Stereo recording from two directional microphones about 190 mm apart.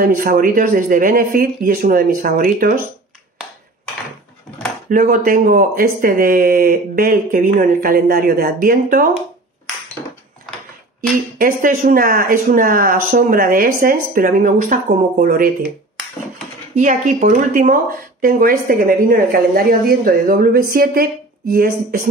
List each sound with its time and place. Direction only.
0.0 s speech: 50° right (ahead or behind)
4.8 s speech: 45° right (ahead or behind)
11.0 s speech: 45° right (ahead or behind)
16.7 s speech: 40° right (ahead or behind)